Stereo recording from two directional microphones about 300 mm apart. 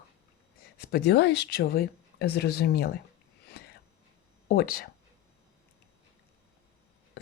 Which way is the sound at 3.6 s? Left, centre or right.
Left.